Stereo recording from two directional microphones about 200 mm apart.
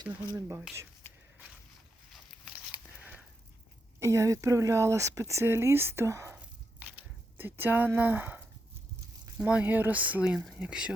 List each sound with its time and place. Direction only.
0.3 s speech: 15° right (ahead or behind)
1.0 s a sound: 10° left (ahead or behind)
4.0 s speech: 15° right (ahead or behind)